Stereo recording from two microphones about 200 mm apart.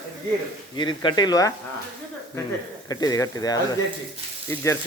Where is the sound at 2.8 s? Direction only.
20° left (ahead or behind).